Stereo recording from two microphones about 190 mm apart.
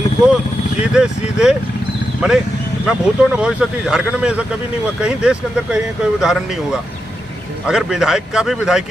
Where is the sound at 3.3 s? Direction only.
5° right (ahead or behind).